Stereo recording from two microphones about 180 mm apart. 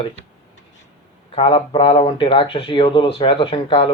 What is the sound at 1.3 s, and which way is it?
Speech, 30° left (ahead or behind).